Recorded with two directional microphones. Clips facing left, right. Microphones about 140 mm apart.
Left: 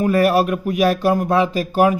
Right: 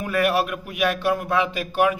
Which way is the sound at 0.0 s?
40° left (ahead or behind).